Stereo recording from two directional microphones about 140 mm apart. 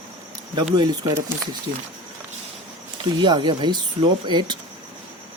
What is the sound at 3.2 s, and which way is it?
Speech, 35° right (ahead or behind).